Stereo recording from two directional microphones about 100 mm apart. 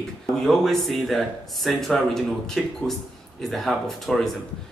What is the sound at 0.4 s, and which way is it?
Speech, 5° left (ahead or behind).